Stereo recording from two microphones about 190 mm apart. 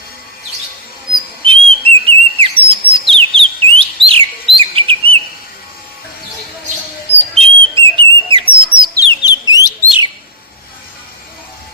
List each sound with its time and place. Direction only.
1.5 s whistle: 30° right (ahead or behind)
4.5 s chirp: 30° right (ahead or behind)
7.3 s chirp: 30° right (ahead or behind)
9.2 s bird: 20° left (ahead or behind)